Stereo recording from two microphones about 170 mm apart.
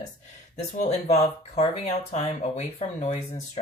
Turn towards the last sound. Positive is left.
turn(degrees=40)  # may be behind; listen again after turning